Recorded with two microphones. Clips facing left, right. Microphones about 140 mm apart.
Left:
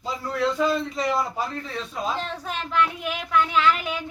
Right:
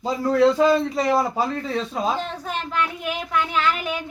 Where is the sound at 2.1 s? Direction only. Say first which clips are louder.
Right 3 dB; centre (ahead or behind).